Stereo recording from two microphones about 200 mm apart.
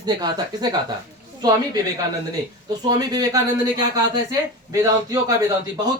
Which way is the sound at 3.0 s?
20° right (ahead or behind).